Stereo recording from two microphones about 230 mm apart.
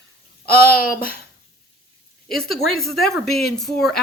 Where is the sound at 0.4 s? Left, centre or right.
Left.